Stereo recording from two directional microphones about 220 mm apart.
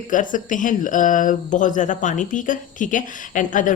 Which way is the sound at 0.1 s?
35° left (ahead or behind).